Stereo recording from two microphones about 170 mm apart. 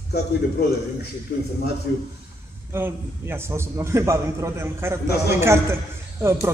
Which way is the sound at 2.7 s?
15° right (ahead or behind).